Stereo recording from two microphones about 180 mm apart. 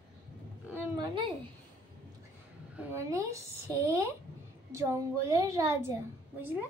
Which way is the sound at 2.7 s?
15° right (ahead or behind).